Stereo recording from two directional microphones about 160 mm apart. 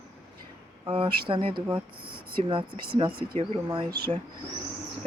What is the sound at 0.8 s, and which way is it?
Speech, 30° right (ahead or behind).